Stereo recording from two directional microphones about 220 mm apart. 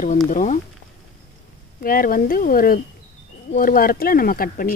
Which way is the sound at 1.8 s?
40° left (ahead or behind).